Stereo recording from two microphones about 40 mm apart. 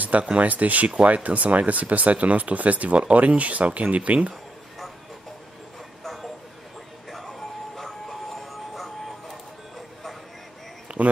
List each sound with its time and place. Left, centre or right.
0.4 s speech: right
7.8 s music: centre
11.0 s speech: right